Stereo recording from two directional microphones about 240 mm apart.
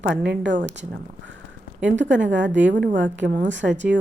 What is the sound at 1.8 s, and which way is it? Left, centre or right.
A woman's voice, right.